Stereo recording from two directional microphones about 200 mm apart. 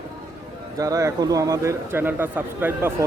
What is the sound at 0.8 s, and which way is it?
A man's voice, 15° right (ahead or behind).